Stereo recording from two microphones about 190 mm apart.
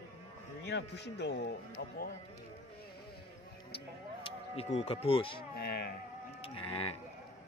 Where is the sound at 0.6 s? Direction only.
65° left (ahead or behind).